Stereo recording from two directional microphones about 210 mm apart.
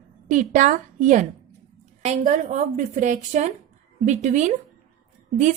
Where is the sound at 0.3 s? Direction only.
40° right (ahead or behind).